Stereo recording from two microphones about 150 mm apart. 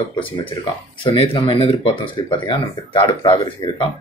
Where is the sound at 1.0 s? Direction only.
35° left (ahead or behind).